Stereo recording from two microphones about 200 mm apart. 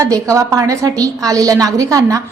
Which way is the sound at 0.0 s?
15° right (ahead or behind).